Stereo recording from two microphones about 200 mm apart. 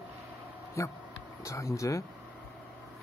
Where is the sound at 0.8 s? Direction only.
15° left (ahead or behind).